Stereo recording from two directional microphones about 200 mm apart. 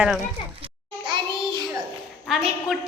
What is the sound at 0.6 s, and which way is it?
Child singing, 25° right (ahead or behind).